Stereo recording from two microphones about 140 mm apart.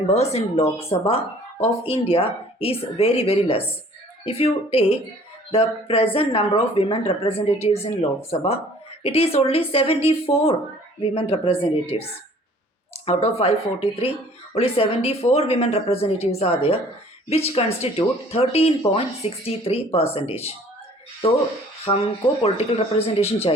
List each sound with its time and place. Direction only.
0.1 s speech: 50° left (ahead or behind)
13.1 s speech: 45° left (ahead or behind)
21.9 s speech: 40° left (ahead or behind)